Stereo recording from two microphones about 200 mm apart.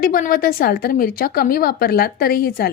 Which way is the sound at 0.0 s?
45° left (ahead or behind).